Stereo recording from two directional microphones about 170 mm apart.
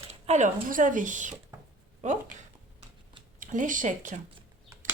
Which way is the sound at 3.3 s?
50° right (ahead or behind).